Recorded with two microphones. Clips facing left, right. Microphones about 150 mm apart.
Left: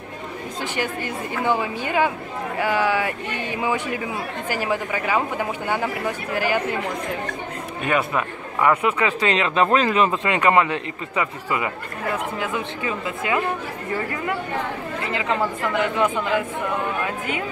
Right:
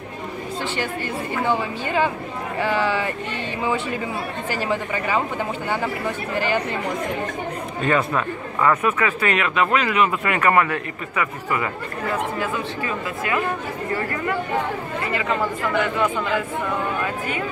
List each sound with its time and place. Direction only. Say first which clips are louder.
1.6 s speech: even; 10° left (ahead or behind)
4.5 s speech: left 1 dB; 10° left (ahead or behind)
7.8 s speech: right 1 dB; 15° left (ahead or behind)